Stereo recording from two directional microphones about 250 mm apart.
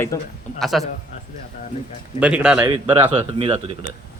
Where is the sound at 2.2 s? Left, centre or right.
Centre.